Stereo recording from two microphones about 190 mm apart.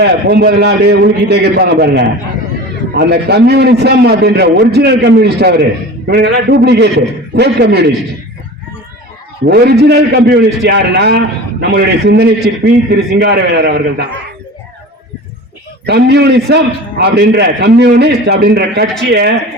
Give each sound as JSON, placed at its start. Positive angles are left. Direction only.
{"t": 0.0, "sound": "a man's voice", "side_deg": -60}
{"t": 9.5, "sound": "a man's voice", "side_deg": -55}
{"t": 15.9, "sound": "a man's voice", "side_deg": -60}